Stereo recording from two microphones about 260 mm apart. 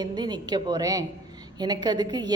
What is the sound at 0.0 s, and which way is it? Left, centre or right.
A woman's voice, centre.